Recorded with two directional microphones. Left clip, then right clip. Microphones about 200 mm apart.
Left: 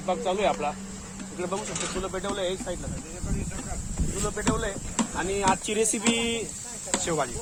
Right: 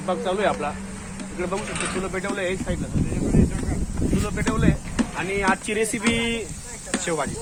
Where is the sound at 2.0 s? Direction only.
5° right (ahead or behind).